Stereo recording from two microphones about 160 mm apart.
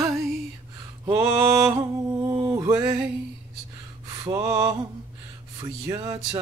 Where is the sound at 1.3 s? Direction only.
20° right (ahead or behind).